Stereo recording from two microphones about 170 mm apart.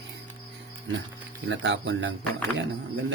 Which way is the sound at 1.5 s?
90° right.